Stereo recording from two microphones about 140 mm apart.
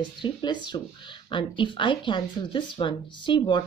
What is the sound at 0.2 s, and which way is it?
A woman's voice, 35° left (ahead or behind).